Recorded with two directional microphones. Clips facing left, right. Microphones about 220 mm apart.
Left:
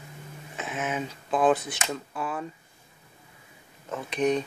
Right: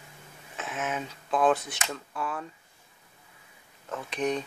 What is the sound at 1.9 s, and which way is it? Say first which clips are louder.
Speech: left 2 dB; 5° left (ahead or behind).